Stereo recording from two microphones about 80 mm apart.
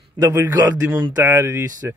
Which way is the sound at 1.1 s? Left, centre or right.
Right.